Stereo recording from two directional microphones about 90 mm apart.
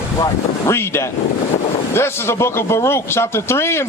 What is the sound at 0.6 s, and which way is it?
Speech, 30° left (ahead or behind).